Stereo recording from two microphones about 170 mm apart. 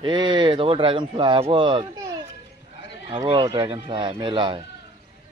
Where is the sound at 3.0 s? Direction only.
30° right (ahead or behind).